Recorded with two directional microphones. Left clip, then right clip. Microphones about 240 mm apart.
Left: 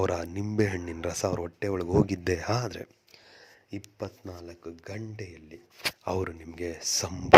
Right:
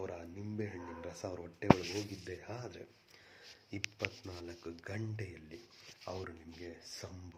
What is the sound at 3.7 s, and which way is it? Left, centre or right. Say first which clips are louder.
Speech: left 2 dB; centre.